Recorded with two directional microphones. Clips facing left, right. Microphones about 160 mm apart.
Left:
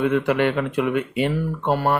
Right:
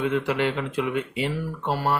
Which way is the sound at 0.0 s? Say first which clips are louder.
Left 4 dB; 60° left (ahead or behind).